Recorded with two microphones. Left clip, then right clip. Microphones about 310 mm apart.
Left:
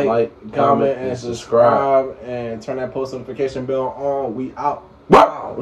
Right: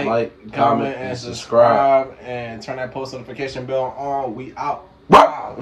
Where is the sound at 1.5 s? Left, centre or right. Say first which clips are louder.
Even; right.